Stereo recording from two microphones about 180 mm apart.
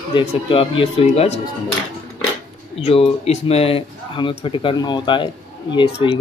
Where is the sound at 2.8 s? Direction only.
35° left (ahead or behind).